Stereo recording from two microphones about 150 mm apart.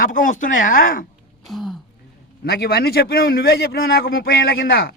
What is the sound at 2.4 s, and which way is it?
A man's voice, 90° left.